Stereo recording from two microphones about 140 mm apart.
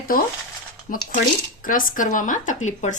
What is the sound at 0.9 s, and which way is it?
Speech, 70° left (ahead or behind).